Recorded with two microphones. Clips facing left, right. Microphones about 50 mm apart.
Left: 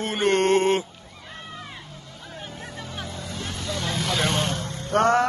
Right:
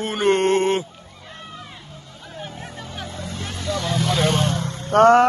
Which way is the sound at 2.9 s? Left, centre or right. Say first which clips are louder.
Right 3 dB; right.